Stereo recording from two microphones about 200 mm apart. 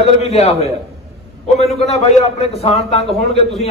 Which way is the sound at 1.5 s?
30° left (ahead or behind).